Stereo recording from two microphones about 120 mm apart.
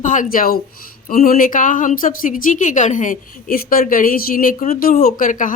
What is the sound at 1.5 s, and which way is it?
A woman's voice, 90° left.